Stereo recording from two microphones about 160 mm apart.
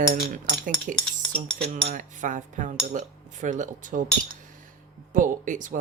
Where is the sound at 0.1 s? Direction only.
65° right (ahead or behind).